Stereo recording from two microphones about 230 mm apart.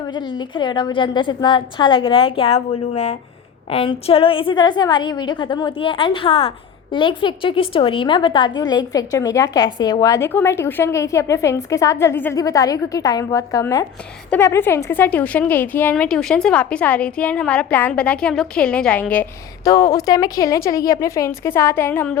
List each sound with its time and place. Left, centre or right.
0.1 s a woman's voice: centre